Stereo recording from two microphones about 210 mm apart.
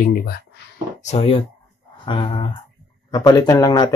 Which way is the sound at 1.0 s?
30° left (ahead or behind).